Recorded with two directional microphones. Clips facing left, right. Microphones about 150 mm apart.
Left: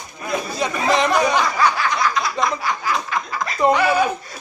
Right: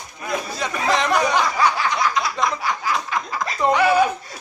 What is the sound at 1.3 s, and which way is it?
Snicker, 20° right (ahead or behind).